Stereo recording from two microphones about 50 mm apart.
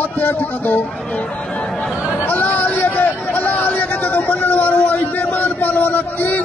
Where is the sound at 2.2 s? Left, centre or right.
Left.